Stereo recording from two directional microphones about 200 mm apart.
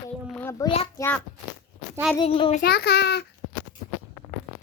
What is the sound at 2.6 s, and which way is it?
Speech, 55° left (ahead or behind).